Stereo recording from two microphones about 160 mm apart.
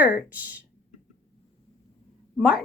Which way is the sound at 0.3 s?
10° right (ahead or behind).